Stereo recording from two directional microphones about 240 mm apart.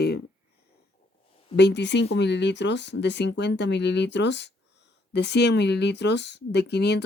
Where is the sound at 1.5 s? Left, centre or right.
Left.